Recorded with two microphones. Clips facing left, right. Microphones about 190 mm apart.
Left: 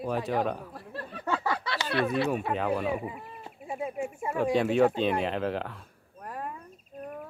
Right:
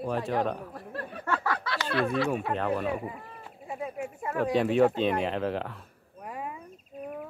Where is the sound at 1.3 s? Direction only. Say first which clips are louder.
Left 1 dB; 15° left (ahead or behind).